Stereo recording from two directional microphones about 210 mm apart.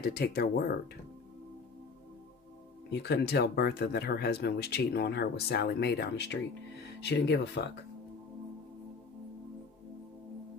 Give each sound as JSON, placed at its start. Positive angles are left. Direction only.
{"t": 0.0, "sound": "speech", "side_deg": 50}
{"t": 2.9, "sound": "speech", "side_deg": 50}